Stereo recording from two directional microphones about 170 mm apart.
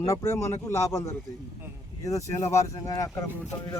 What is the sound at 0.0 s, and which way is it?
A man's voice, 20° left (ahead or behind).